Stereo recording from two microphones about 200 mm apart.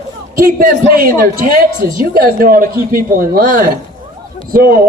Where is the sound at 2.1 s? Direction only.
45° right (ahead or behind).